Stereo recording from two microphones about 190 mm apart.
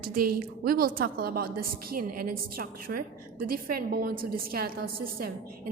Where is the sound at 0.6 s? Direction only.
50° right (ahead or behind).